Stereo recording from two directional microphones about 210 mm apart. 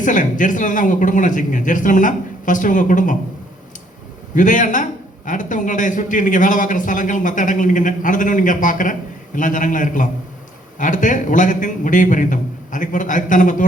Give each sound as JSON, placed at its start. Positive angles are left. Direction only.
{"t": 0.0, "sound": "a man's voice", "side_deg": 40}
{"t": 4.4, "sound": "a man's voice", "side_deg": 40}